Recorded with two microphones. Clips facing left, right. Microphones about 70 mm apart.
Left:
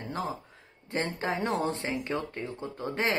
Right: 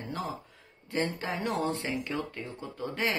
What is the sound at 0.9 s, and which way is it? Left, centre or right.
Speech, left.